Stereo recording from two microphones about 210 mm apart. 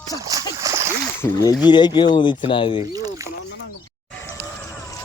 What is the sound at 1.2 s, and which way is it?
Speech, 15° left (ahead or behind).